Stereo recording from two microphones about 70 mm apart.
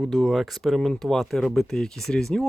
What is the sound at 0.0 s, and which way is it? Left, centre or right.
Speech, centre.